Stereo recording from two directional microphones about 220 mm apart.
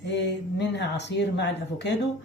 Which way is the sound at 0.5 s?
50° left (ahead or behind).